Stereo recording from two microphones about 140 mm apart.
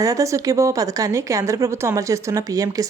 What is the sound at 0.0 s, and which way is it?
A woman's voice, 25° right (ahead or behind).